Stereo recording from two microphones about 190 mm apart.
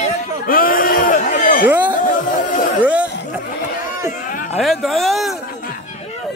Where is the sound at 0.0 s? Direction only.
50° left (ahead or behind).